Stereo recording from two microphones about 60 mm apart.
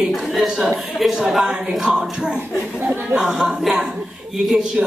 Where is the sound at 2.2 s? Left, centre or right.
Centre.